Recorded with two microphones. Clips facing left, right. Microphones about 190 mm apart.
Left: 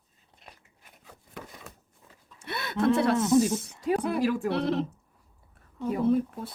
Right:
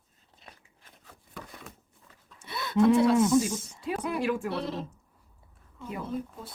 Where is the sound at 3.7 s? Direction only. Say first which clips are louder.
Left 5 dB; 40° left (ahead or behind).